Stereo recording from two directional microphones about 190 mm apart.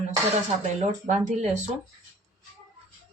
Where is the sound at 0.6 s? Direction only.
40° right (ahead or behind).